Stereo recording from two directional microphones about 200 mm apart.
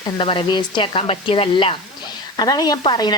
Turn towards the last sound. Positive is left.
turn(degrees=20)  # may be behind; listen again after turning